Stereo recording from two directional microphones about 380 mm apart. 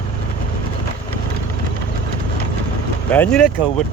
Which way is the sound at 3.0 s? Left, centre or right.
Centre.